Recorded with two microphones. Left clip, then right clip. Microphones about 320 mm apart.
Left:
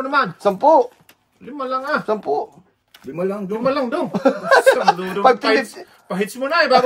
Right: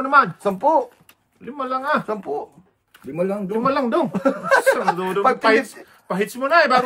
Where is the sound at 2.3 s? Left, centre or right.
Left.